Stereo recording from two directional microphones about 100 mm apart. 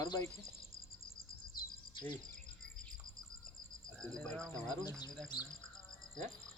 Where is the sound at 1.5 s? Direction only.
45° left (ahead or behind).